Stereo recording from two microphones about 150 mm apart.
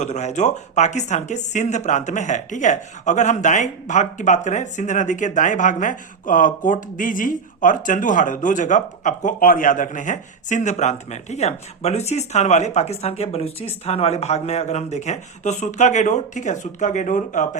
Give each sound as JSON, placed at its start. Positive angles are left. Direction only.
{"t": 0.0, "sound": "a man's voice", "side_deg": 50}